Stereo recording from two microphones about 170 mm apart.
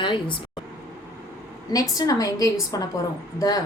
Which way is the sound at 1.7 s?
20° left (ahead or behind).